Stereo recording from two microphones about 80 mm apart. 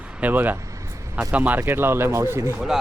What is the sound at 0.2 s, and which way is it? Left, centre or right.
Speech, right.